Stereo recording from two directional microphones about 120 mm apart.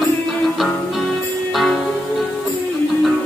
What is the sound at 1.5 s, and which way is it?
Music, centre (ahead or behind).